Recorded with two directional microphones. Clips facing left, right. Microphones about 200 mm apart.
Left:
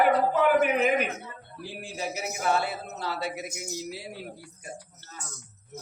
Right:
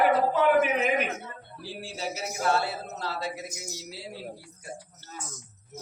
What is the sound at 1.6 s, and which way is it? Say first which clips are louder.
Speech: even; 15° left (ahead or behind).